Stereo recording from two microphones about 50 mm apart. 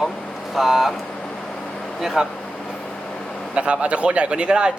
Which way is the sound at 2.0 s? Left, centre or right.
Centre.